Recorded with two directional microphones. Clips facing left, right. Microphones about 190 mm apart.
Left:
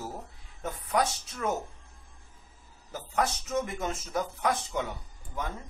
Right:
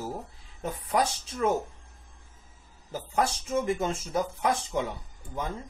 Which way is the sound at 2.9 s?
30° right (ahead or behind).